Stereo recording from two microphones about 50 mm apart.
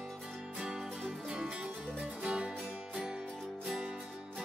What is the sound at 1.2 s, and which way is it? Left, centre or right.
Music, centre.